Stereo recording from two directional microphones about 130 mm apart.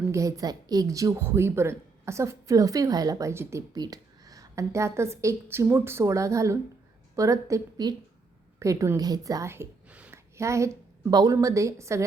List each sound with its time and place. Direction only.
0.1 s a woman's voice: 25° right (ahead or behind)